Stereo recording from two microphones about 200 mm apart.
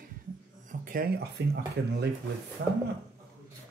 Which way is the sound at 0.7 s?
45° right (ahead or behind).